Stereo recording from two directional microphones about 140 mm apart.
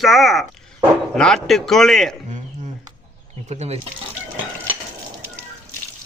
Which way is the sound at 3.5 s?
50° right (ahead or behind).